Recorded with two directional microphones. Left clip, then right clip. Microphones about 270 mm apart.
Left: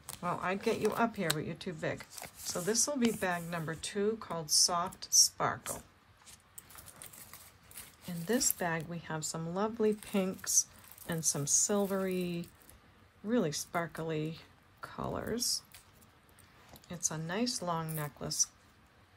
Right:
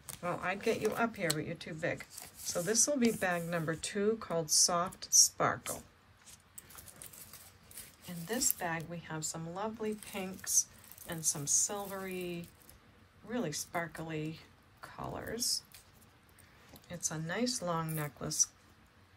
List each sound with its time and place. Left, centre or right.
0.2 s speech: centre
8.3 s a woman's voice: centre